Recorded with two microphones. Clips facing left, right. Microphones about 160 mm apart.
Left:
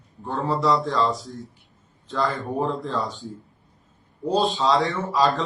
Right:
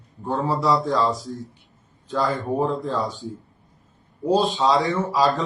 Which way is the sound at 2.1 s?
Centre (ahead or behind).